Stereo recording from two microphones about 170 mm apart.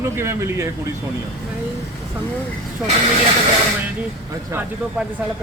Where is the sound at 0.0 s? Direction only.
15° right (ahead or behind).